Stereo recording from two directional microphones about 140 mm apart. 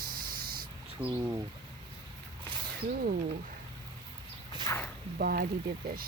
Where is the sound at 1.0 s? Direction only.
10° right (ahead or behind).